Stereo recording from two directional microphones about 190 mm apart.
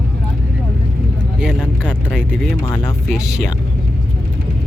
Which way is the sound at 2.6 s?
20° left (ahead or behind).